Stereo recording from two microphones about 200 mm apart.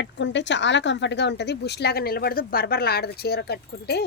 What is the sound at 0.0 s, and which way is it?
A woman's voice, 65° left (ahead or behind).